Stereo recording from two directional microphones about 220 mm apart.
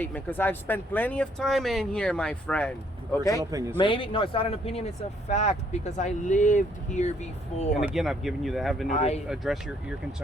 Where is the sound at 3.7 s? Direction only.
20° left (ahead or behind).